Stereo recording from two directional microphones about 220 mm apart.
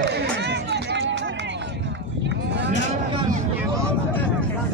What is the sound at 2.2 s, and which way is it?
Cattle, 55° right (ahead or behind).